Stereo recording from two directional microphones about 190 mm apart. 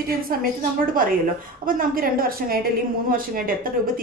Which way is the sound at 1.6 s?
50° right (ahead or behind).